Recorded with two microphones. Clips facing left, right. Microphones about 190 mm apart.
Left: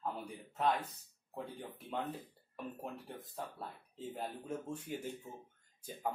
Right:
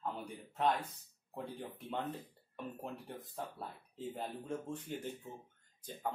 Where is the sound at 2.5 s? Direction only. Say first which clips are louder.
Even; centre (ahead or behind).